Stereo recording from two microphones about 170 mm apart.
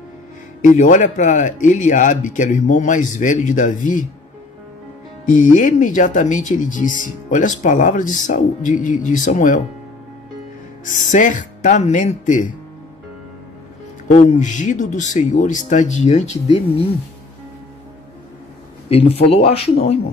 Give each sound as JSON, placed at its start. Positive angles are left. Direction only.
{"t": 0.6, "sound": "speech", "side_deg": 50}
{"t": 5.3, "sound": "speech", "side_deg": 50}
{"t": 10.9, "sound": "speech", "side_deg": 50}
{"t": 14.0, "sound": "speech", "side_deg": 45}
{"t": 18.9, "sound": "speech", "side_deg": 35}